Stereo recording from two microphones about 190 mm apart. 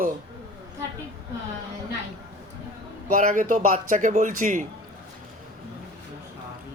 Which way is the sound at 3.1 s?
45° right (ahead or behind).